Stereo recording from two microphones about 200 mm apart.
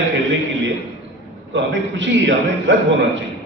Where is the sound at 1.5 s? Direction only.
65° right (ahead or behind).